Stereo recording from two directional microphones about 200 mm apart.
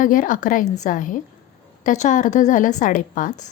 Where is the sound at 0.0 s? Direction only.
40° left (ahead or behind).